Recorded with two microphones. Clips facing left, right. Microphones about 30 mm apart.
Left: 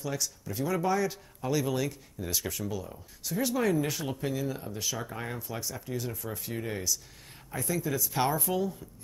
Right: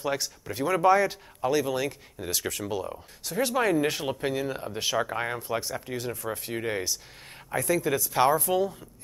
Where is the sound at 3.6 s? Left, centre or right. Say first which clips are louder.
Right 4 dB; right.